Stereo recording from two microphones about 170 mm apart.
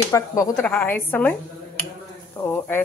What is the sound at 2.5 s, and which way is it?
Speech, 10° left (ahead or behind).